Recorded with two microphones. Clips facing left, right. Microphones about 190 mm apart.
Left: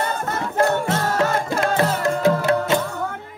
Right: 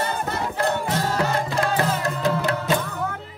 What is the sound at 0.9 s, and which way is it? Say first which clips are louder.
Music: left 2 dB; 50° left (ahead or behind).